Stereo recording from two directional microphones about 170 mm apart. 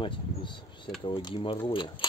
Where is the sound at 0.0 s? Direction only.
30° left (ahead or behind).